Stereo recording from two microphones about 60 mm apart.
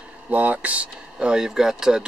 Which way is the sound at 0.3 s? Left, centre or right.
Right.